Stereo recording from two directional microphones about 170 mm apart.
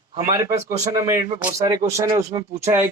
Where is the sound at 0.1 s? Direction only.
20° right (ahead or behind).